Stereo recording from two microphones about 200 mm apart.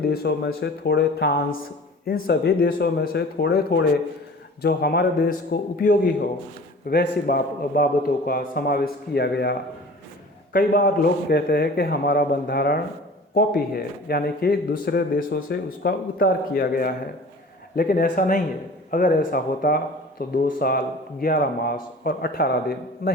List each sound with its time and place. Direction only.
0.0 s speech: 50° left (ahead or behind)